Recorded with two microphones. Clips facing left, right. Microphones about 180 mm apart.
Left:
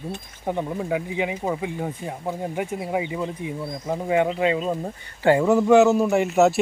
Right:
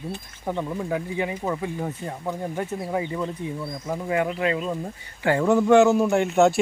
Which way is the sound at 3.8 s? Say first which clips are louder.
Left 3 dB; 25° left (ahead or behind).